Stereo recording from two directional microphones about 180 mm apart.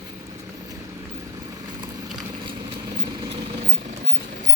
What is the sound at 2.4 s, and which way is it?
Vehicle, 30° right (ahead or behind).